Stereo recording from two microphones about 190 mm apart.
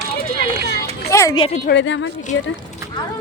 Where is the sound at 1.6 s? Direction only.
70° left (ahead or behind).